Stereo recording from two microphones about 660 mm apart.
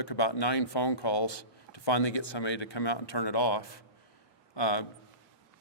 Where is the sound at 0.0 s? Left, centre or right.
Left.